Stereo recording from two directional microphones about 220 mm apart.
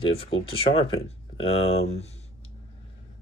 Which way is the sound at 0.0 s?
25° left (ahead or behind).